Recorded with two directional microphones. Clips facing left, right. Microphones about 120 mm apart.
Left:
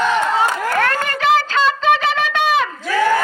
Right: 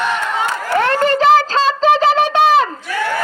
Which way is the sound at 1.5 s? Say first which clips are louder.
Right 2 dB; 35° right (ahead or behind).